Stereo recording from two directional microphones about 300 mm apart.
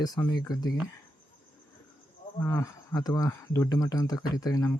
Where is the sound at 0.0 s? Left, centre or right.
Centre.